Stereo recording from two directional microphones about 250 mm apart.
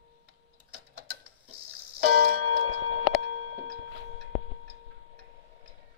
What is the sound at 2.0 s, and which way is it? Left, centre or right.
Music, right.